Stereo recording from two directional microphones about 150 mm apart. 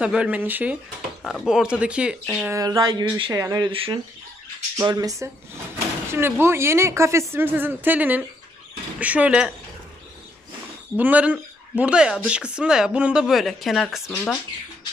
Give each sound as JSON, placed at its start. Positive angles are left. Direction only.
{"t": 0.0, "sound": "speech", "side_deg": -10}
{"t": 1.2, "sound": "speech", "side_deg": 0}
{"t": 2.4, "sound": "speech", "side_deg": -20}
{"t": 4.7, "sound": "speech", "side_deg": -25}
{"t": 11.0, "sound": "speech", "side_deg": -10}